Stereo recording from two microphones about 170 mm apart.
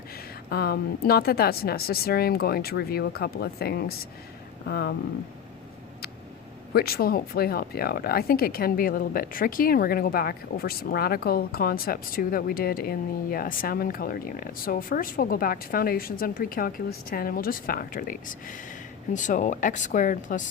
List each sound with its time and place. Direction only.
0.5 s speech: 65° left (ahead or behind)
6.7 s speech: 65° left (ahead or behind)